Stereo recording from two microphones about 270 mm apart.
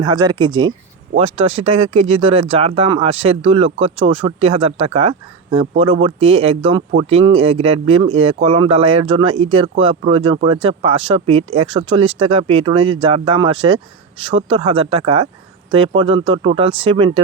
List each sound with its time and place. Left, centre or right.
0.0 s speech: centre